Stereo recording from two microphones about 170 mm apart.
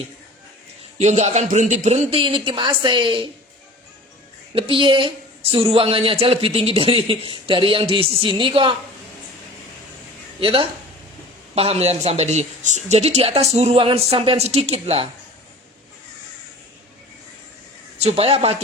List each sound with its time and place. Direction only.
0.9 s a woman's voice: 40° right (ahead or behind)
4.5 s a woman's voice: 30° right (ahead or behind)
10.4 s a woman's voice: 30° right (ahead or behind)
18.0 s a woman's voice: 35° right (ahead or behind)